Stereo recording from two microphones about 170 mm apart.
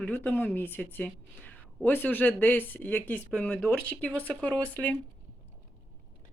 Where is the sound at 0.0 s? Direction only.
10° left (ahead or behind).